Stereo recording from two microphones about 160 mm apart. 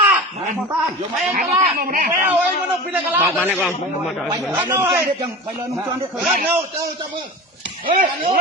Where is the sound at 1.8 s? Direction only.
60° right (ahead or behind).